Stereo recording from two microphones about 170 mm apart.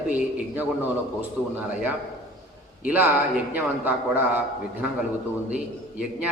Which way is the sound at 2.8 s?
10° right (ahead or behind).